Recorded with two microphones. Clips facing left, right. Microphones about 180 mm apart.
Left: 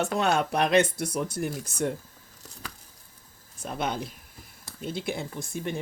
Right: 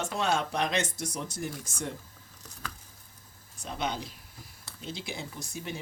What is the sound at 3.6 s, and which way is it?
A woman's voice, 55° left (ahead or behind).